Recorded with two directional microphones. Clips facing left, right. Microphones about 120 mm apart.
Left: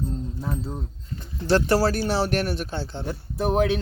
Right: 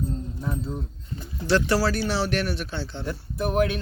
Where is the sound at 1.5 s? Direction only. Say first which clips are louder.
Left 2 dB; 45° left (ahead or behind).